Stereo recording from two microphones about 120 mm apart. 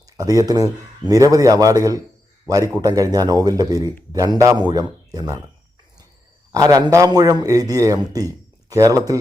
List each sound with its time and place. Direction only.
0.0 s a man's voice: 30° right (ahead or behind)
6.5 s a man's voice: 30° right (ahead or behind)